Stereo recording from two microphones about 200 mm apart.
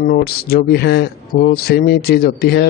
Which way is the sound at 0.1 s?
50° left (ahead or behind).